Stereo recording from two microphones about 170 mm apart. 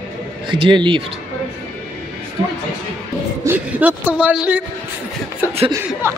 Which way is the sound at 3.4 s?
10° right (ahead or behind).